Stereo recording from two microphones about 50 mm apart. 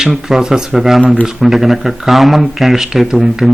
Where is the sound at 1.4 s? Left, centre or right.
Centre.